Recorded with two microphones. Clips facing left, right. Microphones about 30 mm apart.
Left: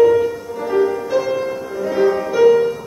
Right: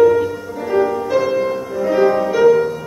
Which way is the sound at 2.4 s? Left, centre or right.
Centre.